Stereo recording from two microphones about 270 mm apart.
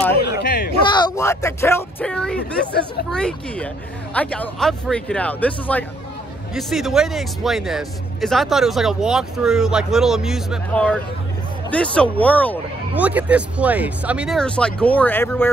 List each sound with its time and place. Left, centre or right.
0.4 s a sound: left
0.9 s speech: centre
12.9 s speech: centre